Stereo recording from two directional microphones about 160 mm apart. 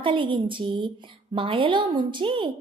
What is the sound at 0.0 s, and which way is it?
A woman's voice, 30° right (ahead or behind).